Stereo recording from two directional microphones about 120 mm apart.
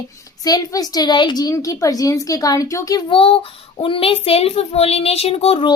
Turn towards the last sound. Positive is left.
turn(degrees=55)  # may be behind; listen again after turning